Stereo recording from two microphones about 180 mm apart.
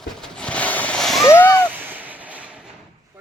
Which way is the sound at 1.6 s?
10° right (ahead or behind).